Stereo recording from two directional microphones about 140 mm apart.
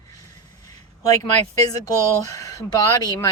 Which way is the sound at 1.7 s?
25° left (ahead or behind).